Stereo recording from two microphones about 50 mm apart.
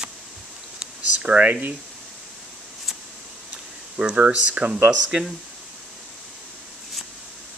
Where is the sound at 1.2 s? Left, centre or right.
Right.